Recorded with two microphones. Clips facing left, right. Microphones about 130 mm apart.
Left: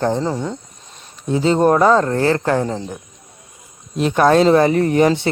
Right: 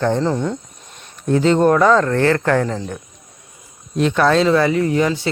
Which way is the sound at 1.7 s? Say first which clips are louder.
Even; 30° left (ahead or behind).